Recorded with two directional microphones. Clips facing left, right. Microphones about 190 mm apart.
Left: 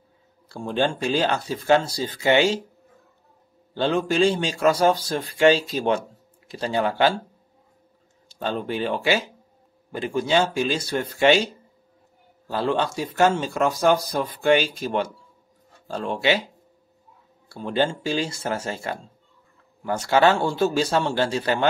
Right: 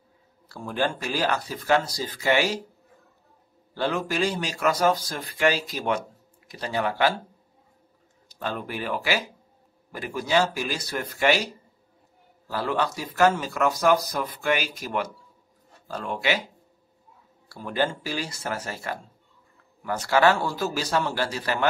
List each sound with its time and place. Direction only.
0.5 s a man's voice: 25° left (ahead or behind)
3.7 s a man's voice: 25° left (ahead or behind)
8.3 s a man's voice: 25° left (ahead or behind)
12.4 s a man's voice: 25° left (ahead or behind)
17.5 s a man's voice: 25° left (ahead or behind)